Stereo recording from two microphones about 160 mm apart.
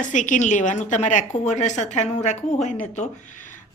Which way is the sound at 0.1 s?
50° left (ahead or behind).